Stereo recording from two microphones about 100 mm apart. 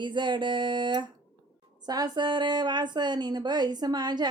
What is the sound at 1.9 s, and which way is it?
Speech, 40° right (ahead or behind).